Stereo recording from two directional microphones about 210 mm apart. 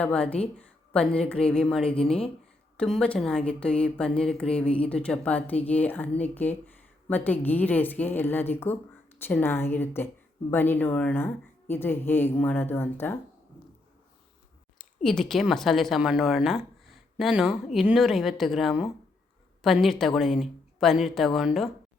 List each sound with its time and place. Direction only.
0.0 s a woman's voice: 5° left (ahead or behind)
14.8 s speech: 5° left (ahead or behind)